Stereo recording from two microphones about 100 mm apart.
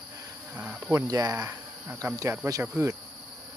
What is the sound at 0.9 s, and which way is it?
Speech, 35° right (ahead or behind).